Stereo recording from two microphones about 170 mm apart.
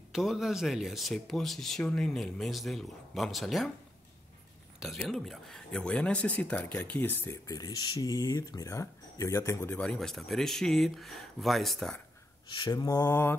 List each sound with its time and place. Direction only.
0.1 s speech: centre (ahead or behind)
4.8 s speech: centre (ahead or behind)
9.8 s speech: 5° left (ahead or behind)
12.4 s mantra: 25° left (ahead or behind)